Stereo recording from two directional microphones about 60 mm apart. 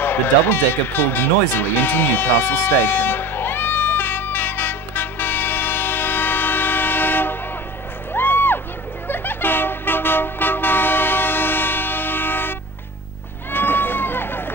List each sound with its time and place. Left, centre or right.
0.0 s music: left
9.0 s vehicle: left
13.5 s run: left